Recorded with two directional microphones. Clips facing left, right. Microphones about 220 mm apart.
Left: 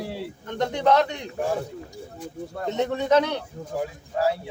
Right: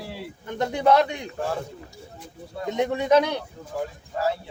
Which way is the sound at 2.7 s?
10° right (ahead or behind).